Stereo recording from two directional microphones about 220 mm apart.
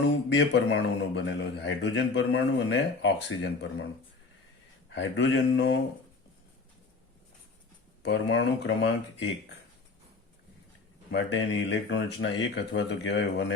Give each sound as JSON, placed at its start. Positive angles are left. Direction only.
{"t": 0.3, "sound": "a man's voice", "side_deg": 55}
{"t": 4.9, "sound": "speech", "side_deg": 55}
{"t": 8.0, "sound": "a man's voice", "side_deg": 55}
{"t": 11.1, "sound": "a man's voice", "side_deg": 55}